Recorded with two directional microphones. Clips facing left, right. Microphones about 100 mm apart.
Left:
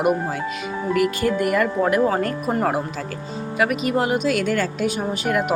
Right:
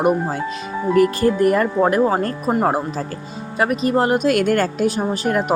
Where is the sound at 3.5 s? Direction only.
35° right (ahead or behind); by 4.6 s 55° right (ahead or behind).